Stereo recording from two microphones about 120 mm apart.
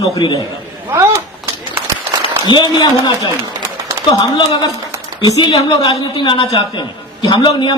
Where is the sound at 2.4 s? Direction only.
40° left (ahead or behind).